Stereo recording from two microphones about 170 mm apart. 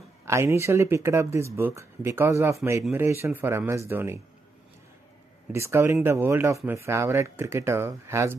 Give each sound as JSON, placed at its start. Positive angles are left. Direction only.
{"t": 0.2, "sound": "speech", "side_deg": -15}
{"t": 5.5, "sound": "speech", "side_deg": -15}